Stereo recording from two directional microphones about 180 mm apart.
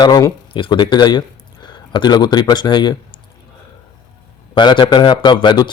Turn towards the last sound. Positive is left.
turn(degrees=25)  # may be behind; listen again after turning